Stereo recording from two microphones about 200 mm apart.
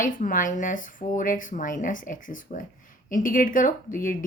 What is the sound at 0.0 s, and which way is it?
A woman's voice, 40° left (ahead or behind).